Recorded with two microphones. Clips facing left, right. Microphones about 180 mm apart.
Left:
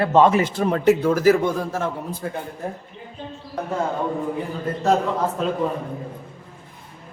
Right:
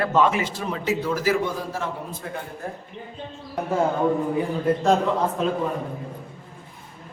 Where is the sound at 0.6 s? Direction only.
55° left (ahead or behind).